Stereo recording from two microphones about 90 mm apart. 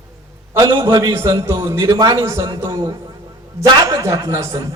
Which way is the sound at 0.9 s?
35° right (ahead or behind).